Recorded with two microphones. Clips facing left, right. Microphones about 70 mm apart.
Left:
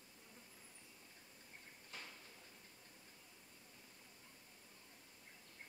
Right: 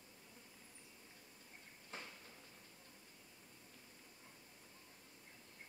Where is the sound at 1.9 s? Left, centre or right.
Right.